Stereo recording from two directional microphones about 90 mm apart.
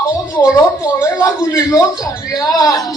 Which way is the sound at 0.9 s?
30° left (ahead or behind).